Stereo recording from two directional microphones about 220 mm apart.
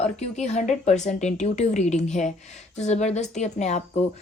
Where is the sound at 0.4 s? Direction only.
30° left (ahead or behind).